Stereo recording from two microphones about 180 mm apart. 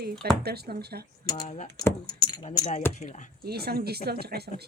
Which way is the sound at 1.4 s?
40° left (ahead or behind).